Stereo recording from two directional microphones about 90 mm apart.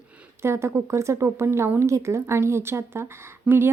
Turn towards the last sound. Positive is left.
turn(degrees=-25)  # may be behind; listen again after turning